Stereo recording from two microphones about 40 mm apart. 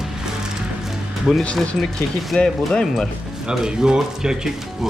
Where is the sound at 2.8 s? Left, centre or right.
Centre.